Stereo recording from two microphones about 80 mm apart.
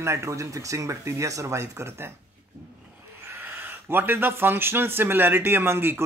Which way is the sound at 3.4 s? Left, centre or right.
Right.